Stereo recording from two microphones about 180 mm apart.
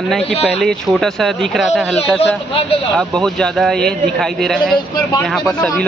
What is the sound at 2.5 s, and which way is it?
Speech, 35° left (ahead or behind).